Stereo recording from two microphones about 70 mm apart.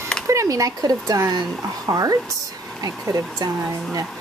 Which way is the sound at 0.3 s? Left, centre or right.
Right.